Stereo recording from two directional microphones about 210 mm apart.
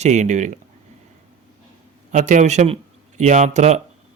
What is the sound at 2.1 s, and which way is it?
Speech, 35° right (ahead or behind).